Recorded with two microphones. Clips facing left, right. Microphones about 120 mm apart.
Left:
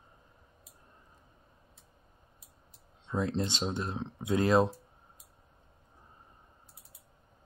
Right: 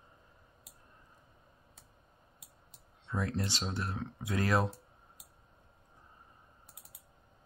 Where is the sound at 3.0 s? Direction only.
20° left (ahead or behind).